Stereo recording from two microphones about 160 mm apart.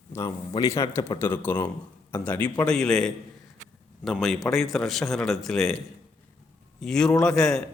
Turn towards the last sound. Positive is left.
turn(degrees=5)  # may be behind; listen again after turning